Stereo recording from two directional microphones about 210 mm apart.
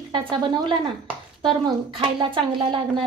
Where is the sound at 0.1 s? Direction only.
25° right (ahead or behind).